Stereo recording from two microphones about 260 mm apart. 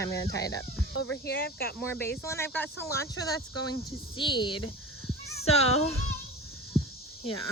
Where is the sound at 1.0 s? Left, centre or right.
Left.